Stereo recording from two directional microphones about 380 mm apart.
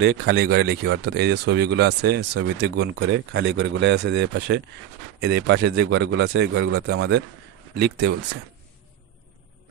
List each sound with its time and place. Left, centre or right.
0.0 s speech: right